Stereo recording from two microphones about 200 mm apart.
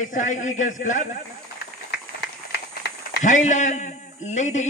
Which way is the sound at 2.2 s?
55° left (ahead or behind).